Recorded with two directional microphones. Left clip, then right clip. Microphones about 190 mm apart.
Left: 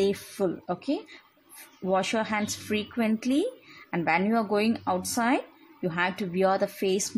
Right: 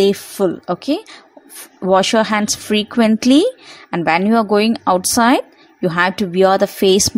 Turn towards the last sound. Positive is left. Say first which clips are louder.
# right 14 dB
turn(degrees=-40)  # may be behind; listen again after turning